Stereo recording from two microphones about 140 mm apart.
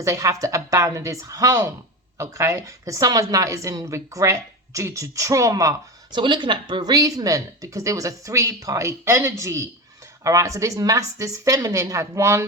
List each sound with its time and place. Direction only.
0.0 s a woman's voice: 25° right (ahead or behind)